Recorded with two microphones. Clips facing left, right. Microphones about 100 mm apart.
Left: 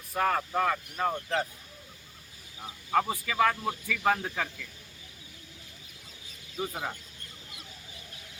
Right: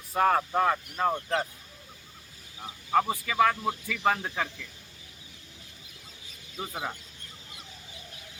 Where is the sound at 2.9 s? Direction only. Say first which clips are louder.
Right 2 dB; 30° right (ahead or behind).